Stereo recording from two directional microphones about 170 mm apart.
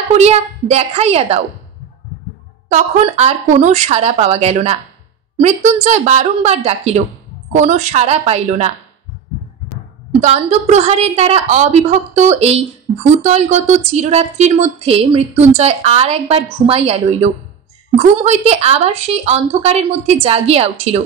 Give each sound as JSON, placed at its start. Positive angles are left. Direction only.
{"t": 0.1, "sound": "speech", "side_deg": -40}
{"t": 2.7, "sound": "speech", "side_deg": -40}
{"t": 10.2, "sound": "speech", "side_deg": -40}